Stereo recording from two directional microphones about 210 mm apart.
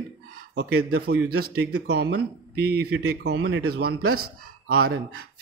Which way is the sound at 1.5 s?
50° right (ahead or behind).